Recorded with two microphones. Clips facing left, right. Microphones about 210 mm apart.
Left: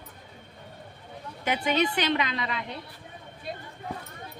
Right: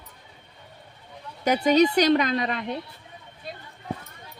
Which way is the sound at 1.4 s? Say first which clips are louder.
Right 7 dB; 40° right (ahead or behind).